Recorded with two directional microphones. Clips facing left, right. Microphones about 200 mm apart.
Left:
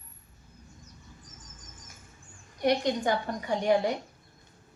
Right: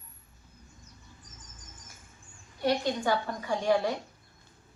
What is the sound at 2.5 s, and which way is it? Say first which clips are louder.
A woman's voice: left 2 dB; 20° left (ahead or behind).